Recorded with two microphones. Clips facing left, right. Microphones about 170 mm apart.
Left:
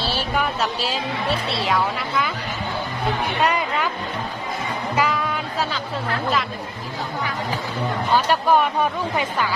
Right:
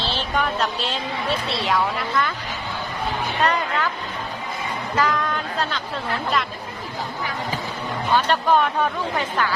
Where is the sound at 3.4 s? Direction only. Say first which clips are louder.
Right 1 dB; 10° left (ahead or behind).